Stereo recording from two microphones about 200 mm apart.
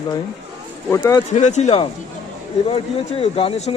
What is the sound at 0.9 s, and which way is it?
Speech, 15° left (ahead or behind).